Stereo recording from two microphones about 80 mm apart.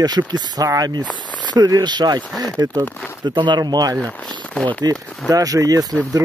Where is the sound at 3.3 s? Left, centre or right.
Right.